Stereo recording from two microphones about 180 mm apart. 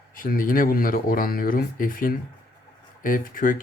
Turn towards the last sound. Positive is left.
turn(degrees=50)  # may be behind; listen again after turning